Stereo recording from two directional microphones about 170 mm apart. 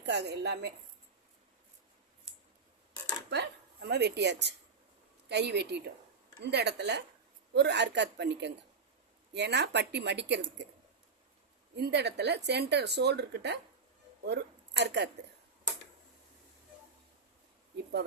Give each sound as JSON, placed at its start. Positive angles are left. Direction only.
{"t": 0.0, "sound": "a woman's voice", "side_deg": -80}
{"t": 3.2, "sound": "speech", "side_deg": -80}
{"t": 11.8, "sound": "speech", "side_deg": -80}